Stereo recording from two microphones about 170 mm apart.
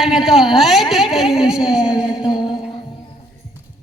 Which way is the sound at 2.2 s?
25° left (ahead or behind).